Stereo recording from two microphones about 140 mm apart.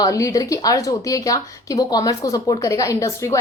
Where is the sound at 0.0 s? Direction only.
25° left (ahead or behind).